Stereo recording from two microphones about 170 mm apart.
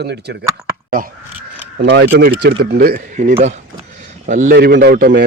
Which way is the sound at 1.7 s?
70° right (ahead or behind).